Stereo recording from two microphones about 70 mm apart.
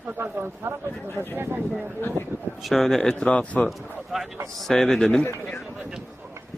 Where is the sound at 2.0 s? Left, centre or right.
Left.